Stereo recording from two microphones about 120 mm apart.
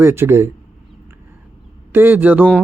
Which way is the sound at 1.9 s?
15° right (ahead or behind).